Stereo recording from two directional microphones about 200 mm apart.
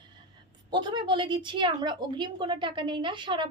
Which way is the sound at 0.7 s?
25° right (ahead or behind).